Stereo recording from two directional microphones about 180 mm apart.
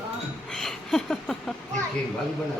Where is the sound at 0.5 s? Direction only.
5° left (ahead or behind).